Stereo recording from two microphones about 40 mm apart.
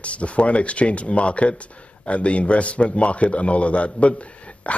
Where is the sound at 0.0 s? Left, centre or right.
Left.